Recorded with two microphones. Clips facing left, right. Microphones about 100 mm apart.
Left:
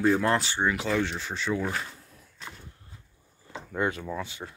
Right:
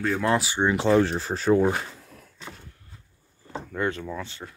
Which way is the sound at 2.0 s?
80° right.